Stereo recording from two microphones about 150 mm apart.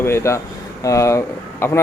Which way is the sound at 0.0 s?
20° left (ahead or behind).